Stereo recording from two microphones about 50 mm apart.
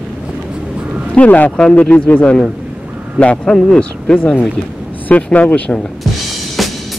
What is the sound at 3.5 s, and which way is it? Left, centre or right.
Speech, centre.